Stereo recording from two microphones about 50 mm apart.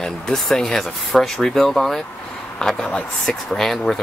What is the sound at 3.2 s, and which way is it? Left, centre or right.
Speech, centre.